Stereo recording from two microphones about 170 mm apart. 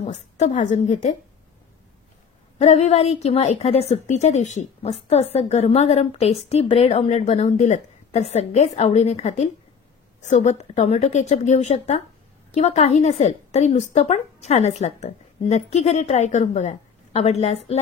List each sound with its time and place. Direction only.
0.0 s speech: 40° left (ahead or behind)
2.6 s a woman's voice: 40° left (ahead or behind)